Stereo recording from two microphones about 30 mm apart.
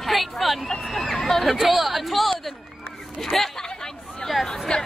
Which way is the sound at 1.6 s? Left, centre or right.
Centre.